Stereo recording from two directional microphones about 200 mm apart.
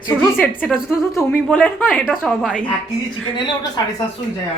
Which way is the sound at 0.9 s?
10° left (ahead or behind).